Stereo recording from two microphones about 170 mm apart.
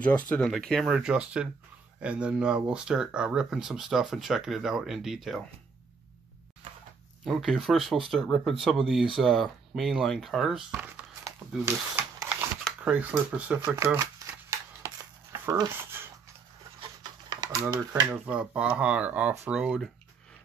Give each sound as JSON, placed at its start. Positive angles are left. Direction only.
{"t": 0.0, "sound": "speech", "side_deg": 10}
{"t": 7.2, "sound": "speech", "side_deg": 0}
{"t": 11.6, "sound": "a sound", "side_deg": -10}
{"t": 12.6, "sound": "speech", "side_deg": -5}
{"t": 17.0, "sound": "typewriter", "side_deg": -25}
{"t": 18.1, "sound": "speech", "side_deg": -10}